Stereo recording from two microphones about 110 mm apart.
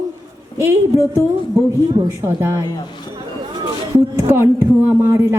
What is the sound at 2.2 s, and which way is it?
Speech, 25° right (ahead or behind).